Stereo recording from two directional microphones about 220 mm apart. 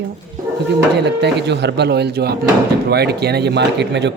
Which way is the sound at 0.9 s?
50° right (ahead or behind).